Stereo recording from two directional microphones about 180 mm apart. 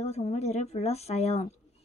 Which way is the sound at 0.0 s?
35° left (ahead or behind).